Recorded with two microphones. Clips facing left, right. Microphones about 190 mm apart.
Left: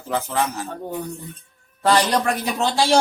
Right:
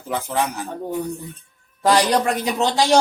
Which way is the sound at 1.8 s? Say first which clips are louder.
Right 1 dB; 10° right (ahead or behind).